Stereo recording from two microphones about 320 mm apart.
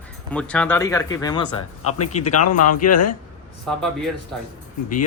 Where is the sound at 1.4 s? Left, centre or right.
Left.